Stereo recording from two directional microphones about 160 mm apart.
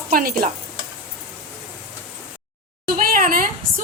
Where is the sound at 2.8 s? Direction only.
60° right (ahead or behind).